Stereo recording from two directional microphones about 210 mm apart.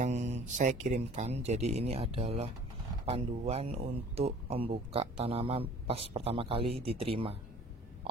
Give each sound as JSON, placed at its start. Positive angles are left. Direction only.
{"t": 0.0, "sound": "speech", "side_deg": -35}